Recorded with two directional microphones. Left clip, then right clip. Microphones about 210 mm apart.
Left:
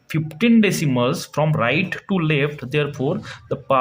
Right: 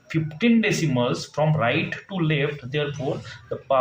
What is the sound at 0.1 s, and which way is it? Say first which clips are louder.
Speech: left 3 dB; 50° left (ahead or behind).